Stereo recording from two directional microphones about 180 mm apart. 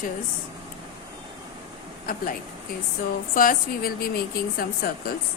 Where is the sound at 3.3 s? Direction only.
55° left (ahead or behind).